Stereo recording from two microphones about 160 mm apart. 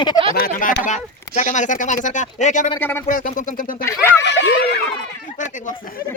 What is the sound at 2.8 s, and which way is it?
Speech, 15° left (ahead or behind).